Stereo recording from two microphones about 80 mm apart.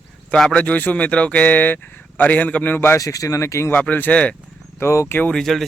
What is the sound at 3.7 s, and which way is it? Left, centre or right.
Speech, left.